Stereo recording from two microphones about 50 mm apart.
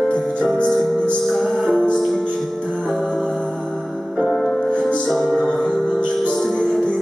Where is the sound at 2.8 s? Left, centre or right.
Centre.